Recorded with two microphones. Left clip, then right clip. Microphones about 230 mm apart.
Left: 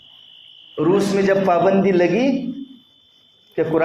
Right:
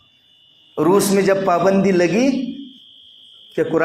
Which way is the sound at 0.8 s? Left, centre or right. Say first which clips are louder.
Right 2 dB; right.